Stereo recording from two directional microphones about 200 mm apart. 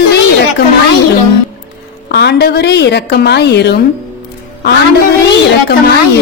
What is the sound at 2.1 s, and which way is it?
A woman's voice, 55° left (ahead or behind).